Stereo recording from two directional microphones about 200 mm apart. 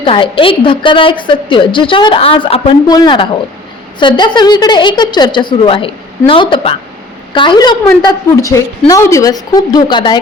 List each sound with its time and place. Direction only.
0.0 s a woman's voice: 25° left (ahead or behind)